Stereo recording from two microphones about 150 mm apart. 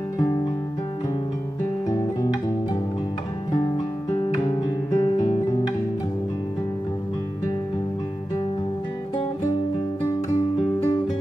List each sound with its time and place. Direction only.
1.9 s guitar: 30° left (ahead or behind)
3.7 s music: 30° left (ahead or behind)
5.0 s guitar: 35° left (ahead or behind)